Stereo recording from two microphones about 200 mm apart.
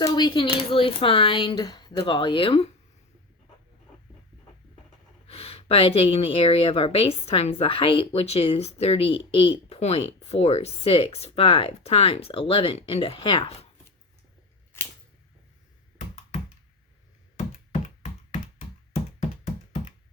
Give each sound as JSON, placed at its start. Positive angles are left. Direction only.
{"t": 0.0, "sound": "a woman's voice", "side_deg": 20}
{"t": 5.3, "sound": "a woman's voice", "side_deg": 30}